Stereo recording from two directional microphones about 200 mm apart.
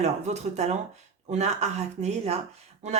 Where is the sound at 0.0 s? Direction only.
35° right (ahead or behind).